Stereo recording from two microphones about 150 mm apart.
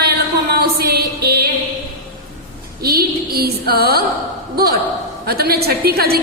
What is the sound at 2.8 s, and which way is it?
A woman's voice, 90° right.